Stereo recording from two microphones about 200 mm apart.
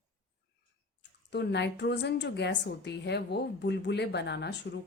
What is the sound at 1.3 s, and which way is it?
A woman's voice, 60° left (ahead or behind).